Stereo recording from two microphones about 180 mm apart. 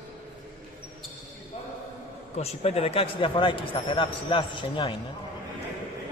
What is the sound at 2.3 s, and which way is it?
Speech, 35° left (ahead or behind).